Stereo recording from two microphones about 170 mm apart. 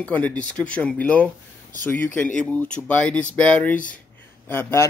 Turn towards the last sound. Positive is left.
turn(degrees=10)  # may be behind; listen again after turning